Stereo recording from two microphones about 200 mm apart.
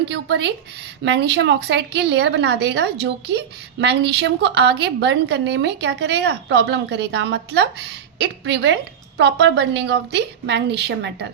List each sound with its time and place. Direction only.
0.1 s a woman's voice: 60° right (ahead or behind)